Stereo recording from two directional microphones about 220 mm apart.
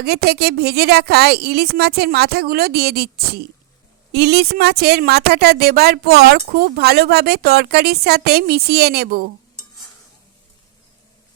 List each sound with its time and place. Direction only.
0.0 s a woman's voice: 45° right (ahead or behind)